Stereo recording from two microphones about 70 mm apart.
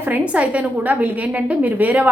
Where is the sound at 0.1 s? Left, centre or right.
Right.